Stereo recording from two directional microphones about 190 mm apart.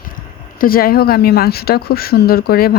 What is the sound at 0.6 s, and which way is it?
Speech, 50° left (ahead or behind).